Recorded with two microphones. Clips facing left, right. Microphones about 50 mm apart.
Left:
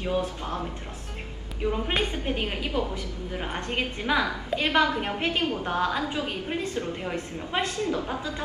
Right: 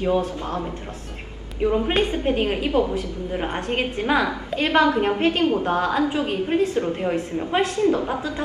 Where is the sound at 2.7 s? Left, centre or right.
Right.